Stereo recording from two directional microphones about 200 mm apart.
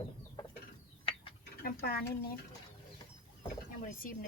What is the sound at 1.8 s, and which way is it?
Speech, 50° left (ahead or behind).